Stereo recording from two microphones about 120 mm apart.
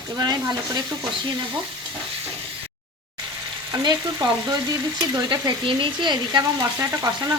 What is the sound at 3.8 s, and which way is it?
Frying, 35° right (ahead or behind).